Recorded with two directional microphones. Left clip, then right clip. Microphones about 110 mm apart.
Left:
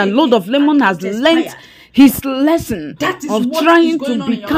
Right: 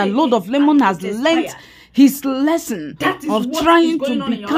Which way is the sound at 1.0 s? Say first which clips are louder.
Left 4 dB; 25° left (ahead or behind).